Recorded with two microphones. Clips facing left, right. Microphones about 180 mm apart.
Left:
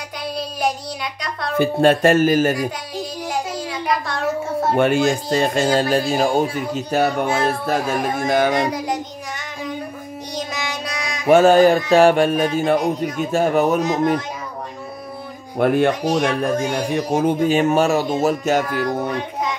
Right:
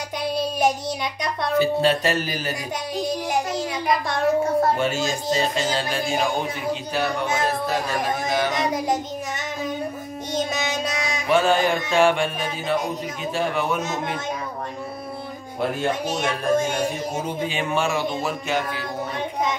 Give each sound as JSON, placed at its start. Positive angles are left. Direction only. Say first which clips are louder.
{"t": 0.4, "sound": "child singing", "louder": "right 1 dB", "side_deg": -20}
{"t": 1.6, "sound": "speech", "louder": "left 6 dB", "side_deg": 50}
{"t": 4.4, "sound": "a child's voice", "louder": "right 2 dB", "side_deg": 0}
{"t": 4.7, "sound": "speech", "louder": "left 7 dB", "side_deg": 60}
{"t": 8.6, "sound": "child singing", "louder": "even", "side_deg": -20}
{"t": 10.3, "sound": "music", "louder": "right 3 dB", "side_deg": -25}
{"t": 11.2, "sound": "speech", "louder": "left 8 dB", "side_deg": 45}
{"t": 15.6, "sound": "speech", "louder": "left 7 dB", "side_deg": 60}